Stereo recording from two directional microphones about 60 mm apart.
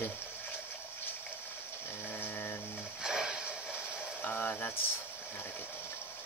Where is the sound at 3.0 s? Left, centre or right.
Centre.